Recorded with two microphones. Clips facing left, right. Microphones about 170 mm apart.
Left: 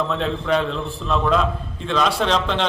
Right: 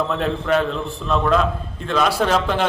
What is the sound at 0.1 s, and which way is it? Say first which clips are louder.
A man's voice: right 1 dB; 5° right (ahead or behind).